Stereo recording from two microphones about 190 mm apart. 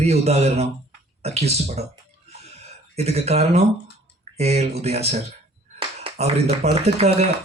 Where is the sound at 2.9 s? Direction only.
35° right (ahead or behind).